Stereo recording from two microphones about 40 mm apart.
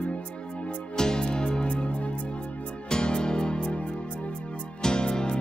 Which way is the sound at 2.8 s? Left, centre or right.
Left.